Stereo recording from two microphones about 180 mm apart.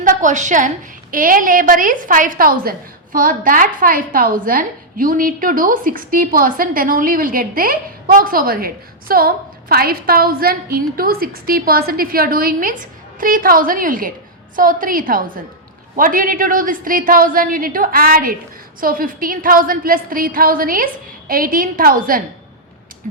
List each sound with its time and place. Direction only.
0.0 s a woman's voice: 45° right (ahead or behind)